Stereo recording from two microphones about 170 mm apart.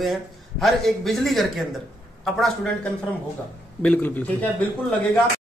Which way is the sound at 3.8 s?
10° left (ahead or behind).